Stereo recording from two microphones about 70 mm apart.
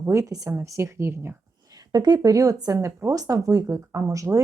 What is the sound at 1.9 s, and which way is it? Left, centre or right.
A woman's voice, right.